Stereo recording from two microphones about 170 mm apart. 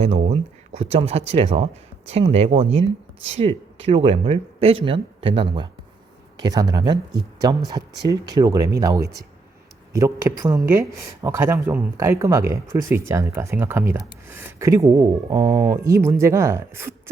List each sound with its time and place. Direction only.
0.0 s speech: 40° right (ahead or behind); by 16.9 s 15° right (ahead or behind)